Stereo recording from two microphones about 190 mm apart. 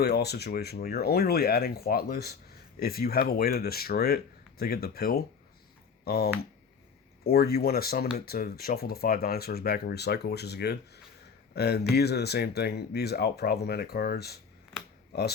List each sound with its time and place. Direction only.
0.0 s speech: 55° left (ahead or behind)